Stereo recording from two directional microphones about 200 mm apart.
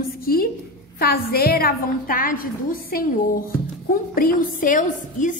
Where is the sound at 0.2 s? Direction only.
50° left (ahead or behind).